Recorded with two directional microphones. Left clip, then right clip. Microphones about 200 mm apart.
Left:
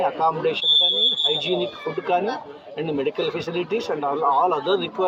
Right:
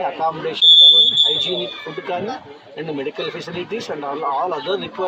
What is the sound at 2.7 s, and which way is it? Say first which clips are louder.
Speech: left 1 dB; 5° left (ahead or behind).